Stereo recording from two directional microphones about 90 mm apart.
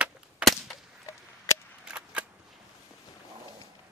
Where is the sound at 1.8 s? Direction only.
15° right (ahead or behind).